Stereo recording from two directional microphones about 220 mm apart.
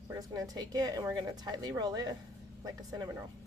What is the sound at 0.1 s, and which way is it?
A woman's voice, 15° right (ahead or behind).